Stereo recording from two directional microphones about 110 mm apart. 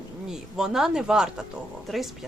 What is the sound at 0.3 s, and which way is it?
Speech, 5° right (ahead or behind).